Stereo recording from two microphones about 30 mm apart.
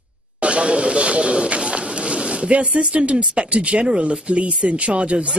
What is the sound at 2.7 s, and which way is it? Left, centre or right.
Speech, right.